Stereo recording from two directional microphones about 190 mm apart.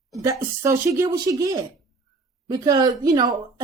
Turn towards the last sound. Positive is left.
turn(degrees=-20)  # may be behind; listen again after turning